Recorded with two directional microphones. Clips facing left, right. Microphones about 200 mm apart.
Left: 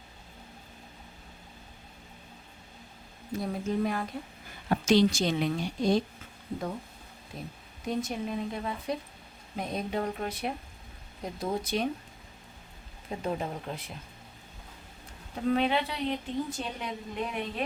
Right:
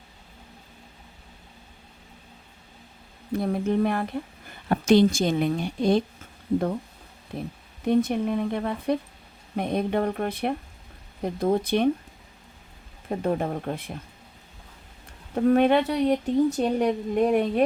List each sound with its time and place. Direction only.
3.3 s a woman's voice: 60° right (ahead or behind)
7.3 s speech: 60° right (ahead or behind)
13.1 s a woman's voice: 55° right (ahead or behind)
15.4 s a woman's voice: 55° right (ahead or behind)